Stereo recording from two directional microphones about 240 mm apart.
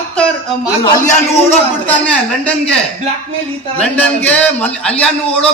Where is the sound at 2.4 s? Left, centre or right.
Centre.